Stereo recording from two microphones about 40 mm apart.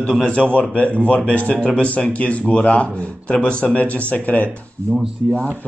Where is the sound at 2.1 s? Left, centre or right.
Left.